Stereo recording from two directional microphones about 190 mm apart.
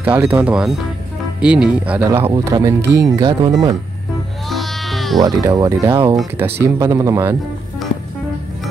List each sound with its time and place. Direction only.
0.0 s speech: 10° right (ahead or behind)
2.3 s speech: 20° right (ahead or behind)
4.5 s music: centre (ahead or behind)
5.2 s speech: 20° right (ahead or behind)